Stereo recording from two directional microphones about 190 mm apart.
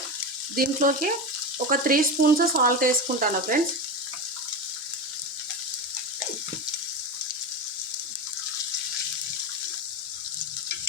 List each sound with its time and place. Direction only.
0.5 s frying: 45° right (ahead or behind)